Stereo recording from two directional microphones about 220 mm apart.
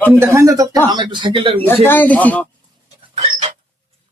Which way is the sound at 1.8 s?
10° left (ahead or behind).